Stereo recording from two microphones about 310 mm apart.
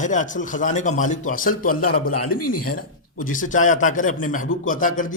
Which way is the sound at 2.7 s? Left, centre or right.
Left.